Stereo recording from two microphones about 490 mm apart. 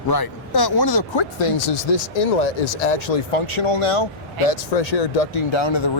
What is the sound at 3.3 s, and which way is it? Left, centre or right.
Speech, left.